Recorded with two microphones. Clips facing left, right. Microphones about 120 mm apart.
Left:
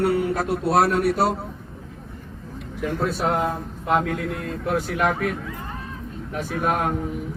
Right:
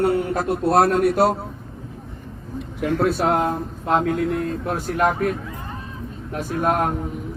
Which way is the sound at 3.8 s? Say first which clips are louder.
Right 3 dB; 35° right (ahead or behind).